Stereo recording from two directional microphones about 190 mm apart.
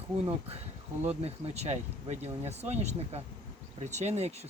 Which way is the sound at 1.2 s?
35° right (ahead or behind).